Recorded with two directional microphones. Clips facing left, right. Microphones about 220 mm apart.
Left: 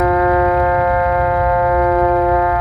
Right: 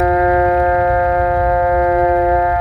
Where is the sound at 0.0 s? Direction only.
25° right (ahead or behind).